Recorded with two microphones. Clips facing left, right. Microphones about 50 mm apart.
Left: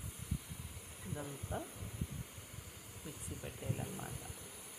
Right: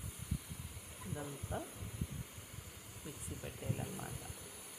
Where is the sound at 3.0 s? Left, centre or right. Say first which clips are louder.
Even; centre.